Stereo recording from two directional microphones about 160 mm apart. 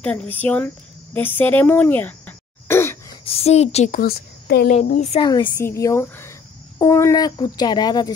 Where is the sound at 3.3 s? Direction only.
40° left (ahead or behind).